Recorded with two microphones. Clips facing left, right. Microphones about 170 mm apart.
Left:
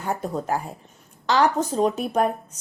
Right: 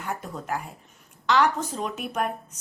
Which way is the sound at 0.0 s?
35° left (ahead or behind).